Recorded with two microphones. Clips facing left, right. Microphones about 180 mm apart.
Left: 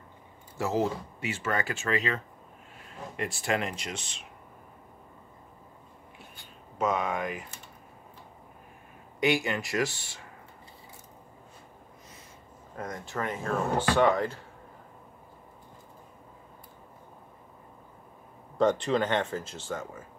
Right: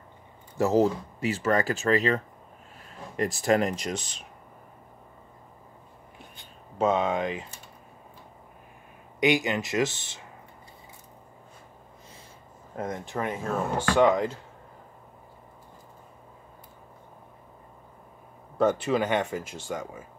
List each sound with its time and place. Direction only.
0.6 s speech: 40° right (ahead or behind)
6.3 s speech: 25° right (ahead or behind)
9.2 s speech: 20° right (ahead or behind)
12.7 s speech: 25° right (ahead or behind)
18.6 s speech: 5° right (ahead or behind)